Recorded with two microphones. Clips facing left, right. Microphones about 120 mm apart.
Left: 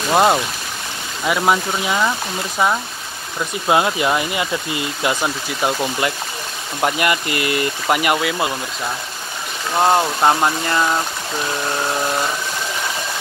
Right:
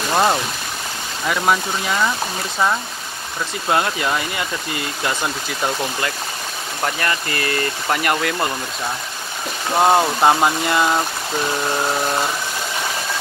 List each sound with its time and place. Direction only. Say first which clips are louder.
0.1 s speech: left 3 dB; 20° left (ahead or behind)
3.6 s speech: left 3 dB; 20° left (ahead or behind)
9.8 s speech: right 1 dB; 5° right (ahead or behind)